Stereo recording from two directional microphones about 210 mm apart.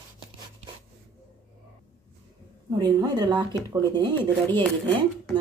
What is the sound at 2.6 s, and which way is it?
Speech, 20° right (ahead or behind).